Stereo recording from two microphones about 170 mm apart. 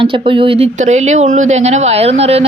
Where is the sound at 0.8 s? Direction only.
45° right (ahead or behind).